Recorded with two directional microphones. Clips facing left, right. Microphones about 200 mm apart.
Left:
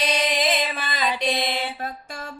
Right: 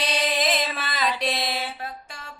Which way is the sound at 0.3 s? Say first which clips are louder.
Left 1 dB; centre (ahead or behind).